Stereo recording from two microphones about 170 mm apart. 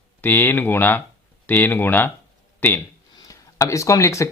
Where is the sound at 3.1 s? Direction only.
20° left (ahead or behind).